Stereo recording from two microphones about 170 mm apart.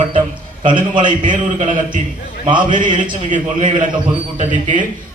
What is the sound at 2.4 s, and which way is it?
Speech, 30° right (ahead or behind).